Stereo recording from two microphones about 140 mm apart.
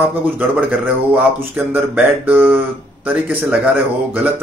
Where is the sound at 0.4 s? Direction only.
10° right (ahead or behind).